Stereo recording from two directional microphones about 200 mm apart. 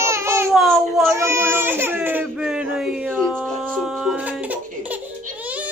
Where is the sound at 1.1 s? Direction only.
15° right (ahead or behind).